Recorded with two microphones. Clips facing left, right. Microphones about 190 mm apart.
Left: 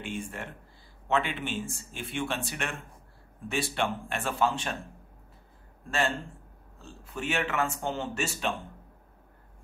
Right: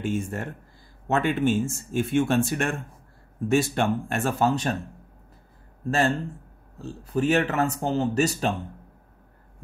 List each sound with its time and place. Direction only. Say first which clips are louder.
0.0 s speech: right 8 dB; 45° right (ahead or behind)
5.9 s speech: right 6 dB; 40° right (ahead or behind)